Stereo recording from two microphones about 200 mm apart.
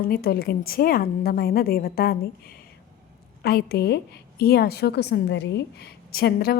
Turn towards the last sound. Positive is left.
turn(degrees=50)  # may be behind; listen again after turning